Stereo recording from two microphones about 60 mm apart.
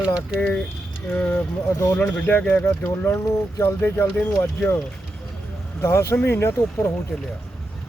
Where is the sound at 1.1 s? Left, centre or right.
Left.